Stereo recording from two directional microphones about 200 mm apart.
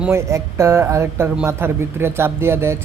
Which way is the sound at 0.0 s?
10° right (ahead or behind).